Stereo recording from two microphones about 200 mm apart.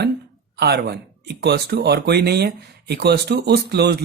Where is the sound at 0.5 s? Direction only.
50° right (ahead or behind).